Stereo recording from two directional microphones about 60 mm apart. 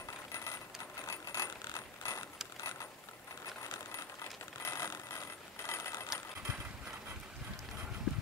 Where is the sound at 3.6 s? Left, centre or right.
Left.